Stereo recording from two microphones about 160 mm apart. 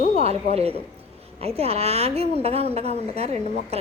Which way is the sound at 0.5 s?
40° right (ahead or behind).